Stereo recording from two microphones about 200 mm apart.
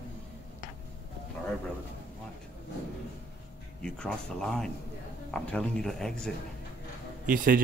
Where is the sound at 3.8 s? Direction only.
5° left (ahead or behind).